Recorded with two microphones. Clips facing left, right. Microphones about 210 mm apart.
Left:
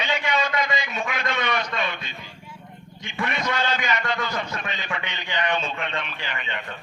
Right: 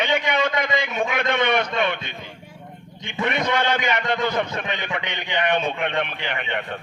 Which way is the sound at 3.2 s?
60° right (ahead or behind).